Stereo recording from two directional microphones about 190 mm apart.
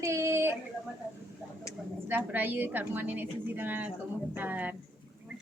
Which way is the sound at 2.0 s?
10° right (ahead or behind).